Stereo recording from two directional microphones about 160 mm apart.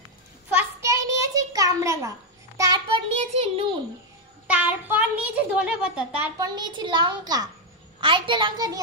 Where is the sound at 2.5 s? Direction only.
25° right (ahead or behind).